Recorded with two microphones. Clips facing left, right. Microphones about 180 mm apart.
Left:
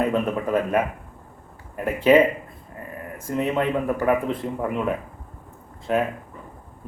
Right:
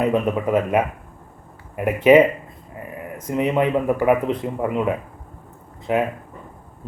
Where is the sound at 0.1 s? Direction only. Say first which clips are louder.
Right 3 dB; 20° right (ahead or behind).